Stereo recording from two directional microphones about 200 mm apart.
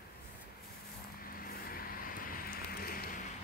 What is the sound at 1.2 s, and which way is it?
Vehicle, 45° left (ahead or behind).